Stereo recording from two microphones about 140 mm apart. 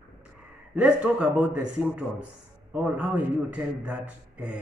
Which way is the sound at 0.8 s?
10° right (ahead or behind).